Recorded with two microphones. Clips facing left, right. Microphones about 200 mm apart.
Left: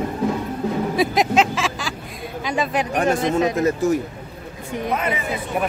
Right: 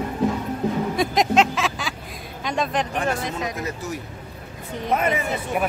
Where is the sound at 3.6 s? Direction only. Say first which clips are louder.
Left 11 dB; 50° left (ahead or behind).